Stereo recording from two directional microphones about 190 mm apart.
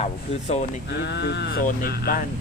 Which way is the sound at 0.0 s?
35° left (ahead or behind).